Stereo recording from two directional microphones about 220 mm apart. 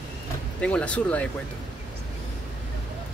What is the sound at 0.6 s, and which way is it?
Speech, 5° left (ahead or behind).